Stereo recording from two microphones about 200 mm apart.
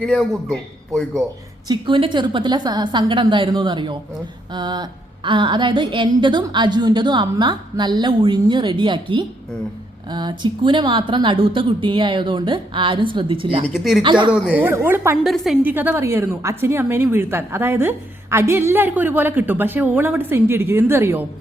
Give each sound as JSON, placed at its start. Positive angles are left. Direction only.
{"t": 0.0, "sound": "a man's voice", "side_deg": 0}
{"t": 1.6, "sound": "a woman's voice", "side_deg": -25}
{"t": 13.7, "sound": "a man's voice", "side_deg": 0}
{"t": 14.0, "sound": "a woman's voice", "side_deg": -25}
{"t": 14.3, "sound": "a woman's voice", "side_deg": -5}